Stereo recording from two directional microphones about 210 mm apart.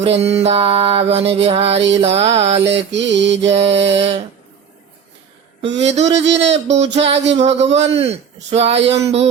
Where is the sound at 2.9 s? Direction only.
55° right (ahead or behind).